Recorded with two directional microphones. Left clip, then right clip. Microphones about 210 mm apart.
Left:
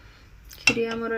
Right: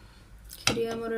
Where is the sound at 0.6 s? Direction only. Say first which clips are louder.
Left 5 dB; 10° left (ahead or behind).